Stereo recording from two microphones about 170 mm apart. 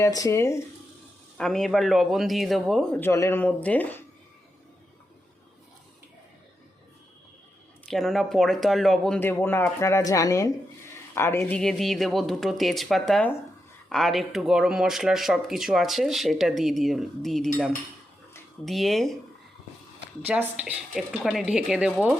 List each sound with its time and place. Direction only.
0.0 s speech: 20° left (ahead or behind)
1.4 s speech: 5° left (ahead or behind)
3.0 s speech: 15° left (ahead or behind)
7.9 s speech: centre (ahead or behind)
20.2 s speech: 10° right (ahead or behind)